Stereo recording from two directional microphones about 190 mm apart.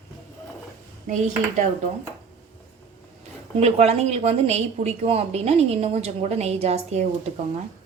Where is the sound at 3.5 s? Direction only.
35° right (ahead or behind).